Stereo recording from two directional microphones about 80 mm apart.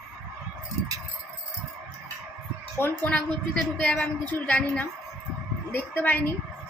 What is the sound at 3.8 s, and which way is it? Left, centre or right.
A woman's voice, centre.